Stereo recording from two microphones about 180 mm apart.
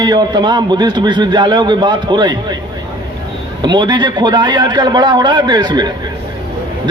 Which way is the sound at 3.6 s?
25° right (ahead or behind).